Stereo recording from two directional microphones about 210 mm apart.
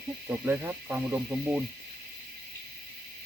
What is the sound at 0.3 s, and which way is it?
Speech, 10° right (ahead or behind).